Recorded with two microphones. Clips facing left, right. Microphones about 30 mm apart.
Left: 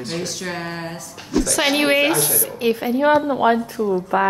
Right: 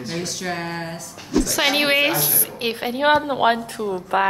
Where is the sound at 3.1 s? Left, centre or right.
Right.